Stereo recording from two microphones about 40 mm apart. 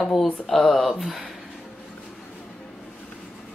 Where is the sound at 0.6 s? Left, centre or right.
Left.